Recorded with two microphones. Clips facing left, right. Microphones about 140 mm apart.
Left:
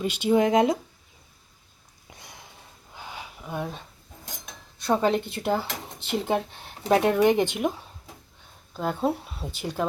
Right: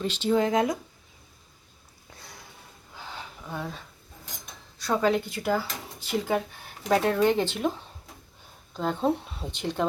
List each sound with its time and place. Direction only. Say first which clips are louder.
0.0 s speech: left 3 dB; 10° left (ahead or behind)
2.1 s a sound: even; 20° left (ahead or behind)
4.8 s speech: left 1 dB; 20° left (ahead or behind)
8.7 s speech: even; 5° left (ahead or behind)